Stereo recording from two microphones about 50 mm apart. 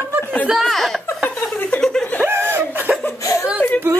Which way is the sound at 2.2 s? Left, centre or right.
Right.